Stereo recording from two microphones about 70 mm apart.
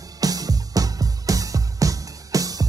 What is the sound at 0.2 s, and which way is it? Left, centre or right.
Music, right.